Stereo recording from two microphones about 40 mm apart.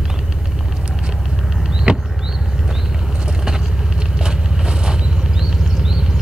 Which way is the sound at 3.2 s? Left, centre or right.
Centre.